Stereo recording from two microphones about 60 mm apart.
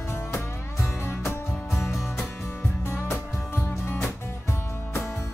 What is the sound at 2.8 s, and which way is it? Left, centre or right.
Music, left.